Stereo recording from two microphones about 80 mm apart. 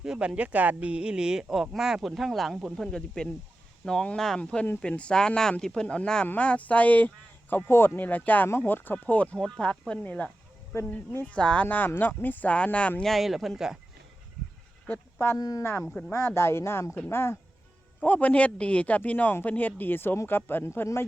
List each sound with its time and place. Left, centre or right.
0.0 s a man's voice: centre
13.0 s speech: centre
15.4 s speech: left
15.8 s speech: centre
16.1 s a man's voice: left
18.0 s a man's voice: centre